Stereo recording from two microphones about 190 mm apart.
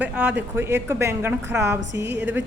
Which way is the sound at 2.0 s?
65° right (ahead or behind).